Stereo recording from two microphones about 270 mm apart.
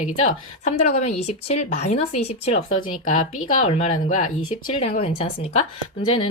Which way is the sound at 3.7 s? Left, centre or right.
Left.